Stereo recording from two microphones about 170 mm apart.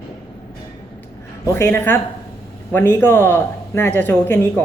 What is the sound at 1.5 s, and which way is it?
Speech, 10° left (ahead or behind).